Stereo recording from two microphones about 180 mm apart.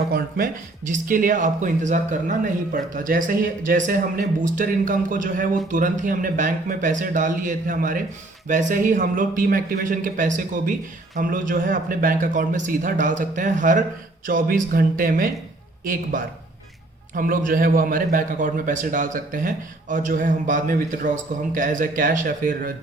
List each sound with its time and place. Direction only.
0.1 s a man's voice: 50° right (ahead or behind)